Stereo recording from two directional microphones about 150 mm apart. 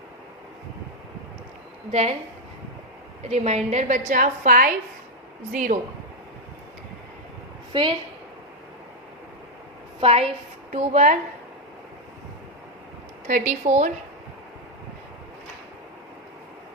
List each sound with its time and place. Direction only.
1.9 s a woman's voice: 45° right (ahead or behind)
3.2 s a woman's voice: 45° right (ahead or behind)
7.7 s a woman's voice: 35° right (ahead or behind)
10.0 s a woman's voice: 45° right (ahead or behind)
13.5 s a woman's voice: 50° right (ahead or behind)